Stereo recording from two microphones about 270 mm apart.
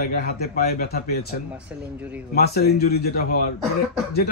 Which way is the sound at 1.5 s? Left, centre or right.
Centre.